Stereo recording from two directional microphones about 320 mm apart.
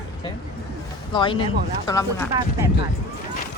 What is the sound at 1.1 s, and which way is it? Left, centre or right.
Speech, centre.